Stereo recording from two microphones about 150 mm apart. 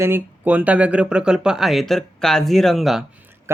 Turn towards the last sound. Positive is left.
turn(degrees=-15)  # may be behind; listen again after turning